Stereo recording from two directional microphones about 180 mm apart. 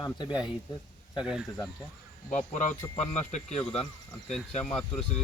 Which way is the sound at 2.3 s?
40° left (ahead or behind).